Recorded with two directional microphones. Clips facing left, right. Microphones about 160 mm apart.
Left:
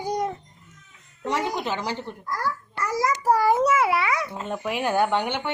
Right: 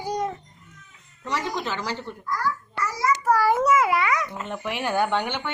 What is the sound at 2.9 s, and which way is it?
Speech, 45° left (ahead or behind).